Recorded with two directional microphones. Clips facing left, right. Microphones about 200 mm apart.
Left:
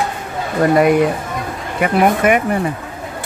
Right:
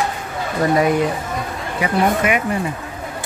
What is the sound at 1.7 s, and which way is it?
Speech, 50° left (ahead or behind).